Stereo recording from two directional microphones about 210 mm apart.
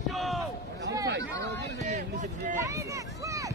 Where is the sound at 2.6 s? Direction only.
15° right (ahead or behind).